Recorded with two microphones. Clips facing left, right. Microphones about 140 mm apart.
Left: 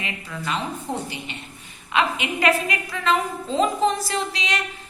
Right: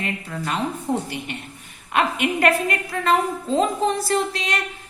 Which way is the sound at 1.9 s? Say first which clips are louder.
Right 2 dB; 50° right (ahead or behind).